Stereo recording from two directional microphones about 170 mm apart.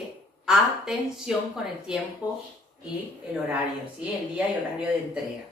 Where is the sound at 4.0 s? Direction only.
5° right (ahead or behind).